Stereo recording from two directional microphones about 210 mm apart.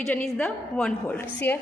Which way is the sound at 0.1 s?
5° left (ahead or behind).